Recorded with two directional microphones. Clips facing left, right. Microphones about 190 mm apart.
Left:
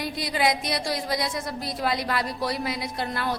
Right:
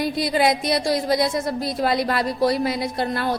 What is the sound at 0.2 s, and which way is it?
A woman's voice, 30° right (ahead or behind).